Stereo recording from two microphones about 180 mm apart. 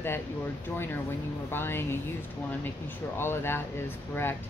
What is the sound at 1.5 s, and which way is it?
Speech, 10° left (ahead or behind).